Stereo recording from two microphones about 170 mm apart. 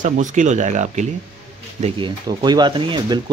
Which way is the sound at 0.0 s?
45° right (ahead or behind).